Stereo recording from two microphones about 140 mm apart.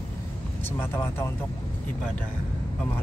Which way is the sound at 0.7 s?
15° left (ahead or behind).